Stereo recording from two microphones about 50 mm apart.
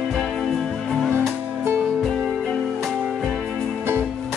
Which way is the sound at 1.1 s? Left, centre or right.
Right.